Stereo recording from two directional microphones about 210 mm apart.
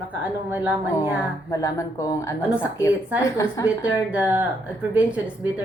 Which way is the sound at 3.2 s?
15° left (ahead or behind).